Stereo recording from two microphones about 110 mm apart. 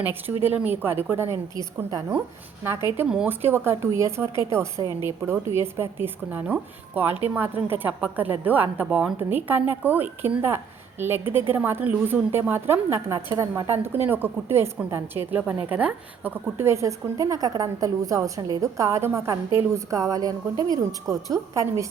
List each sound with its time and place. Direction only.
0.0 s a woman's voice: 20° right (ahead or behind)
3.2 s a woman's voice: 20° right (ahead or behind)